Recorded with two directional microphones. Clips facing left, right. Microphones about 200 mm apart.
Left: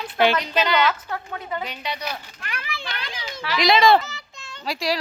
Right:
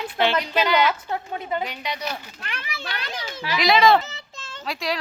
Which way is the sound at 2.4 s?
30° right (ahead or behind).